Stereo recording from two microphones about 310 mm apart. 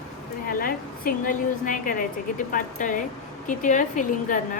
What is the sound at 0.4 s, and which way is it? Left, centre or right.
A woman's voice, left.